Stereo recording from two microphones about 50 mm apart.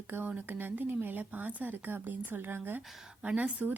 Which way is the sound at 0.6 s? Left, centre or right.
Right.